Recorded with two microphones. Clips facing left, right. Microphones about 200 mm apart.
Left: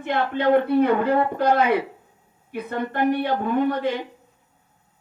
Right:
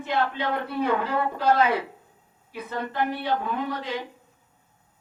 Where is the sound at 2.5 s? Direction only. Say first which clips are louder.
Left 5 dB; 55° left (ahead or behind).